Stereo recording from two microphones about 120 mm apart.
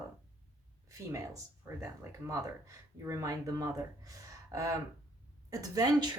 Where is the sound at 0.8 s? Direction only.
25° right (ahead or behind).